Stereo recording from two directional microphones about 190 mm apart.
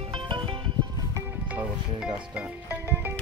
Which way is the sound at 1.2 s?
10° right (ahead or behind).